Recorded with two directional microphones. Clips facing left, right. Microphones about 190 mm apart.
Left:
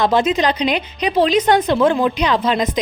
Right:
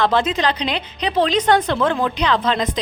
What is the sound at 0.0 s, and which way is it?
A woman's voice, 15° left (ahead or behind).